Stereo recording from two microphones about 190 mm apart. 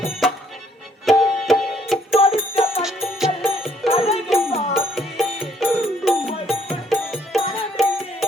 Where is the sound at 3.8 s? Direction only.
30° left (ahead or behind).